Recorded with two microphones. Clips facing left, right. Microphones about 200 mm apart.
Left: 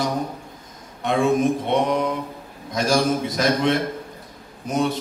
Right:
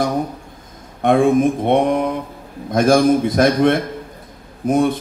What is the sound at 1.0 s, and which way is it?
A man's voice, 55° right (ahead or behind).